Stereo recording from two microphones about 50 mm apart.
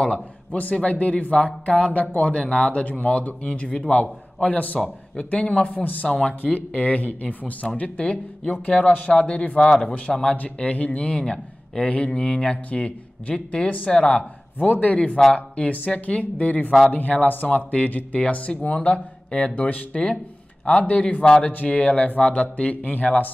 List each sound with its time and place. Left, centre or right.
0.0 s a man's voice: left
4.0 s a man's voice: left
6.0 s speech: centre
9.6 s speech: centre
10.3 s speech: left
14.6 s speech: left